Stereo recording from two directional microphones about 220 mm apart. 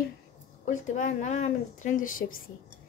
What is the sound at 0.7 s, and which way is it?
A woman's voice, 35° left (ahead or behind).